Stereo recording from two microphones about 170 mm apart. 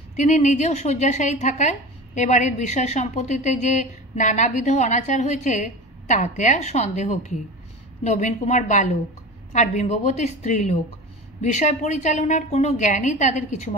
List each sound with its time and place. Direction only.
0.2 s a woman's voice: 45° left (ahead or behind)